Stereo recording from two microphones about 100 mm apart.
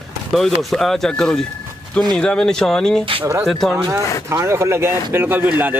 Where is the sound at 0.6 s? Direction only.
Centre (ahead or behind).